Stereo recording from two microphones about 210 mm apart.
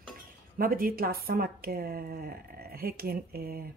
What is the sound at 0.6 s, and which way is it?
Speech, 45° right (ahead or behind).